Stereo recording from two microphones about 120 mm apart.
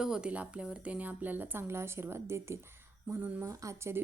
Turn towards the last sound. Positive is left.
turn(degrees=-25)  # may be behind; listen again after turning